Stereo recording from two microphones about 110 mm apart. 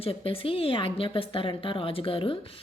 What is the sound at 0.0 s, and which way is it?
A woman's voice, 60° left (ahead or behind).